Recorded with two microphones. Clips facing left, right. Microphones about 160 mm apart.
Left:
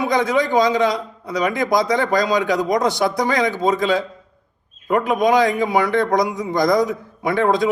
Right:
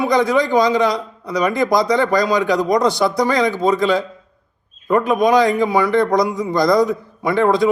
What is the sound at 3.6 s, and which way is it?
A man's voice, 20° left (ahead or behind).